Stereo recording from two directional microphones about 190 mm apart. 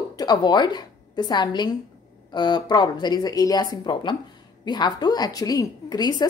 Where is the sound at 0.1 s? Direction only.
20° left (ahead or behind).